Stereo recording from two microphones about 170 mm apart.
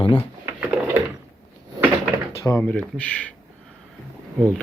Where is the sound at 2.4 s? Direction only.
15° left (ahead or behind).